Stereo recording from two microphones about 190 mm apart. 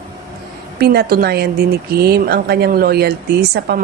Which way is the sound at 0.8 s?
55° right (ahead or behind).